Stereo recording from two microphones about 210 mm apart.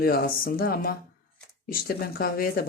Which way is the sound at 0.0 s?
45° left (ahead or behind).